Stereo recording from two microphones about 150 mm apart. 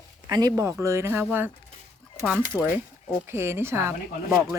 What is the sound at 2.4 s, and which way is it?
Speech, 15° right (ahead or behind).